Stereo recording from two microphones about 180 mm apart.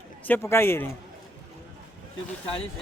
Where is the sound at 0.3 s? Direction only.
15° left (ahead or behind).